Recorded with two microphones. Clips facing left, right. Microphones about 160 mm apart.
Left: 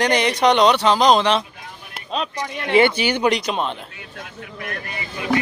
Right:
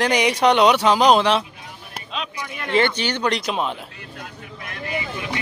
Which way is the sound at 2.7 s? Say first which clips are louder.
Left 4 dB; 10° left (ahead or behind).